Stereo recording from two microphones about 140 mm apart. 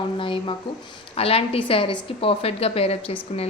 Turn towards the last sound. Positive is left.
turn(degrees=45)  # may be behind; listen again after turning